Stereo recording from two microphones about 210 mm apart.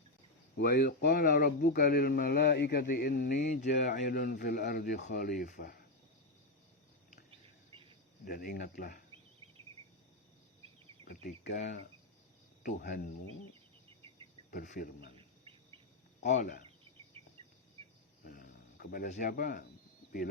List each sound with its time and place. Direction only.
0.5 s speech: 50° left (ahead or behind)
7.3 s cricket: 25° right (ahead or behind)
8.2 s speech: 45° left (ahead or behind)
9.1 s insect: 25° right (ahead or behind)
10.8 s insect: 25° right (ahead or behind)
11.1 s speech: 40° left (ahead or behind)
14.5 s speech: 40° left (ahead or behind)
15.1 s insect: 25° right (ahead or behind)
16.2 s speech: 35° left (ahead or behind)
17.2 s cricket: 25° right (ahead or behind)
18.2 s a sound: 45° left (ahead or behind)